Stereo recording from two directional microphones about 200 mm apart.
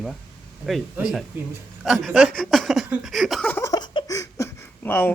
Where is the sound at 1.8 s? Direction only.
Centre (ahead or behind).